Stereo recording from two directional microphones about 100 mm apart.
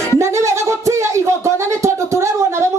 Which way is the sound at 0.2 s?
30° right (ahead or behind).